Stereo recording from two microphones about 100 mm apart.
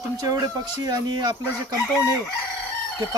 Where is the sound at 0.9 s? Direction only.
45° right (ahead or behind).